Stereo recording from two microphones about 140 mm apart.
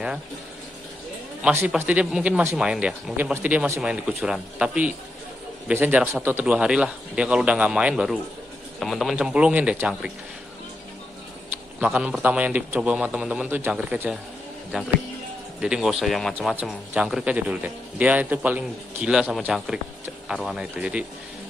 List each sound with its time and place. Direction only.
1.4 s a man's voice: 15° right (ahead or behind)
11.8 s speech: 10° right (ahead or behind)